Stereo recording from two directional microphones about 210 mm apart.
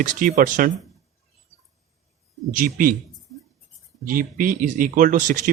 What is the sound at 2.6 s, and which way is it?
Speech, 40° right (ahead or behind).